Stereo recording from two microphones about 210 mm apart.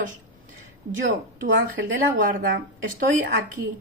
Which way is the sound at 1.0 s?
40° right (ahead or behind).